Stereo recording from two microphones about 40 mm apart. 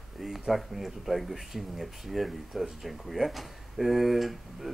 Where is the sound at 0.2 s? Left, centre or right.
Centre.